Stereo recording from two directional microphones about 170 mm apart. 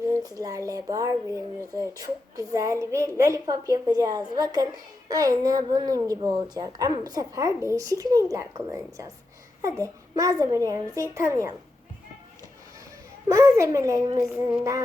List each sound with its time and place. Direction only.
0.0 s speech: 20° right (ahead or behind)
13.2 s a child's voice: 15° right (ahead or behind)